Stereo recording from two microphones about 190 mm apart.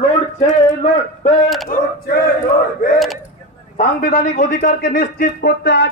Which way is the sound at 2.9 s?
Centre (ahead or behind).